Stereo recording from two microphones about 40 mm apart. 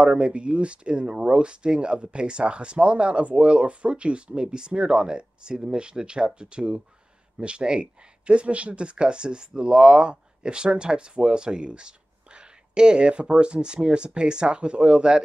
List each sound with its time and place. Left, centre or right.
0.0 s speech: right